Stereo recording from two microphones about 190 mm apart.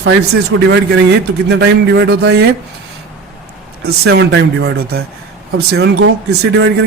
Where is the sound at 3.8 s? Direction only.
60° right (ahead or behind).